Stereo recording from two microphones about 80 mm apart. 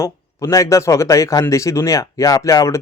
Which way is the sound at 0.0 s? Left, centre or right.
Left.